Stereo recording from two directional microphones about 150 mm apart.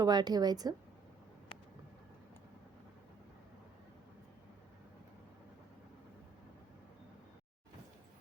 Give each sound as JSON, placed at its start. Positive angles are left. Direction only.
{"t": 0.0, "sound": "a woman's voice", "side_deg": -25}